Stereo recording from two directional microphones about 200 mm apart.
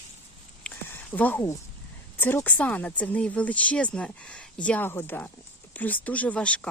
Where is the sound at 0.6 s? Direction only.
10° left (ahead or behind).